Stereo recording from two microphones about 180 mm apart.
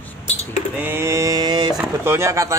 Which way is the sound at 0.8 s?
15° right (ahead or behind).